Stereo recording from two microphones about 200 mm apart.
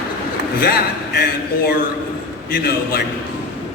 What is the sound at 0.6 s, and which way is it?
Speech, 50° left (ahead or behind).